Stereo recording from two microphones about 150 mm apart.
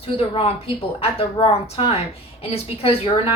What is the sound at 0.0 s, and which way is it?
A woman's voice, 40° left (ahead or behind).